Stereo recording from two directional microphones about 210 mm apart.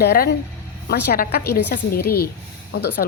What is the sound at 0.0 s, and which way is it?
Speech, 50° left (ahead or behind).